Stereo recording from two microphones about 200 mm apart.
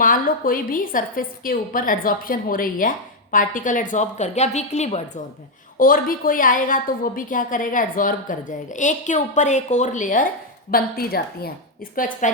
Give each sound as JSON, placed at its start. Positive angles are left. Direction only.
{"t": 0.0, "sound": "a woman's voice", "side_deg": 45}
{"t": 5.8, "sound": "a woman's voice", "side_deg": 45}